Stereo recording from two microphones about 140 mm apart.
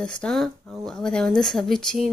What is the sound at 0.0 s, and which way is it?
Speech, 5° left (ahead or behind).